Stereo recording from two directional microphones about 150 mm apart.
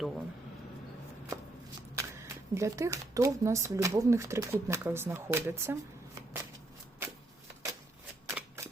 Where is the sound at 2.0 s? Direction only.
20° right (ahead or behind).